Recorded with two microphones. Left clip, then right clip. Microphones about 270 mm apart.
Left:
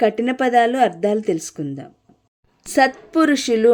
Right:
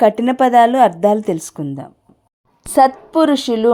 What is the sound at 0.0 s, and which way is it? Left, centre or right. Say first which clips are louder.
A woman's voice: right 5 dB; centre.